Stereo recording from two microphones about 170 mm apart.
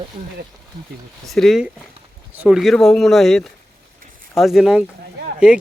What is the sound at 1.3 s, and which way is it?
Speech, centre (ahead or behind).